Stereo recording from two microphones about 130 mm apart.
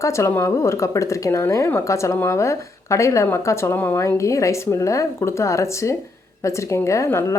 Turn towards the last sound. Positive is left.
turn(degrees=20)  # may be behind; listen again after turning